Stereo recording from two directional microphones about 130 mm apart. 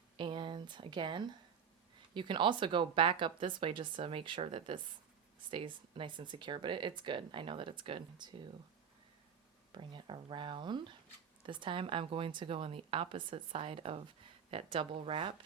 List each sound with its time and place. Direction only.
0.2 s speech: 40° right (ahead or behind)
9.7 s speech: 40° right (ahead or behind)